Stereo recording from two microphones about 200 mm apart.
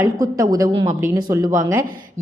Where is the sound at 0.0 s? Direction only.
15° right (ahead or behind).